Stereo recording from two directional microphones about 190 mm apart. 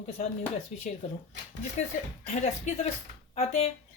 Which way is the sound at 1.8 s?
40° left (ahead or behind).